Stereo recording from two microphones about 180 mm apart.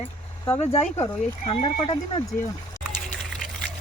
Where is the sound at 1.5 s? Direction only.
35° left (ahead or behind).